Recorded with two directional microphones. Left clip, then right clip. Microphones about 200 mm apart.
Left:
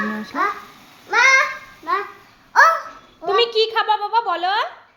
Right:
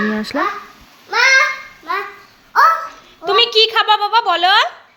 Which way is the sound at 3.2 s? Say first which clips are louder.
Right 5 dB; centre (ahead or behind).